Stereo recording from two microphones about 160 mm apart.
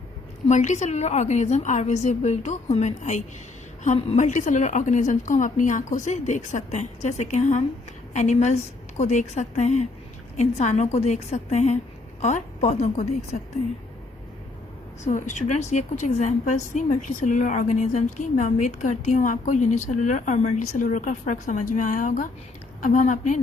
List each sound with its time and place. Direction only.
0.4 s a woman's voice: 50° left (ahead or behind)
15.0 s a woman's voice: 50° left (ahead or behind)